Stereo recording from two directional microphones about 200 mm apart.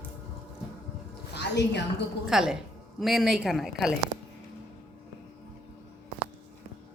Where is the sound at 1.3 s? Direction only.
55° left (ahead or behind).